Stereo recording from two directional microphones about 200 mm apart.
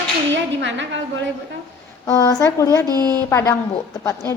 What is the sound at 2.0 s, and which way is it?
Speech, 20° left (ahead or behind).